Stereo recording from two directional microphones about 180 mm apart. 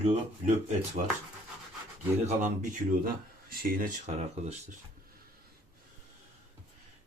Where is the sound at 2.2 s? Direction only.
45° right (ahead or behind).